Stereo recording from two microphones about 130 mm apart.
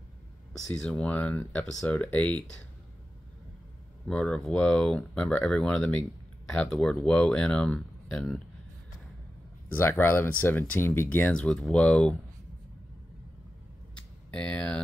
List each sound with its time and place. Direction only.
0.5 s speech: 5° left (ahead or behind)
4.1 s speech: 5° left (ahead or behind)
9.7 s speech: 15° left (ahead or behind)
14.3 s speech: 10° left (ahead or behind)